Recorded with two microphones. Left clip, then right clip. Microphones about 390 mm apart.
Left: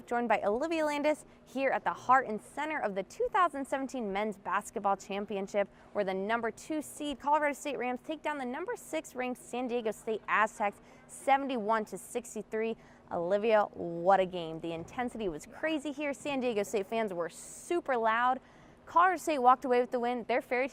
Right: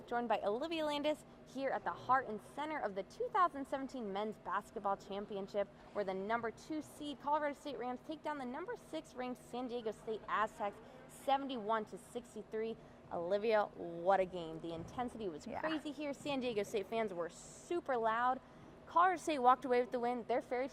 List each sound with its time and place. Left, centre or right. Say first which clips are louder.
0.1 s a woman's voice: left 7 dB; left